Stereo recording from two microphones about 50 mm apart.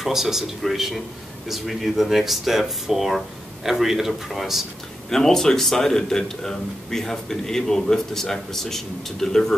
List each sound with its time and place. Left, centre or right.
0.0 s a man's voice: centre